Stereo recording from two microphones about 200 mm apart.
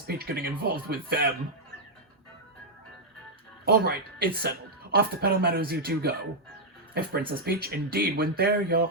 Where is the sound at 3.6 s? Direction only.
50° right (ahead or behind).